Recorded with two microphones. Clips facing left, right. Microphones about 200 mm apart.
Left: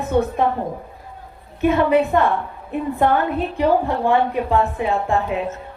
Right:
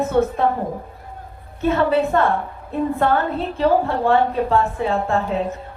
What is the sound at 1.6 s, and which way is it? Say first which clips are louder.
A woman's voice: left 2 dB; 15° left (ahead or behind).